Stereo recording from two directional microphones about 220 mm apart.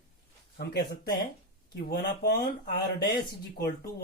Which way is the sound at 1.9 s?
50° left (ahead or behind).